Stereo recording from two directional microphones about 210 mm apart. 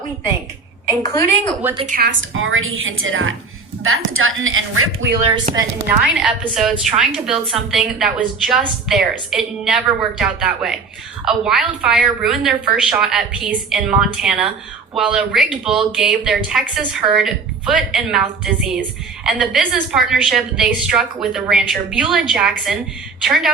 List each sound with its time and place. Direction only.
0.9 s a woman's voice: 15° left (ahead or behind)
1.9 s a woman's voice: 45° right (ahead or behind)
2.3 s a woman's voice: 70° right (ahead or behind)
6.1 s a woman's voice: 5° right (ahead or behind)